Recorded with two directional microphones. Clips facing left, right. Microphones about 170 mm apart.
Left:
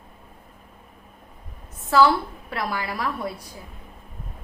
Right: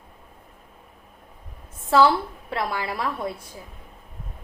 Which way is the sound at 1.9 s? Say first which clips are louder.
Even; 25° right (ahead or behind).